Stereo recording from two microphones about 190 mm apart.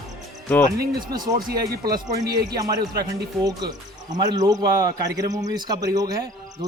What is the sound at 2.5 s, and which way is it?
Speech, 20° right (ahead or behind).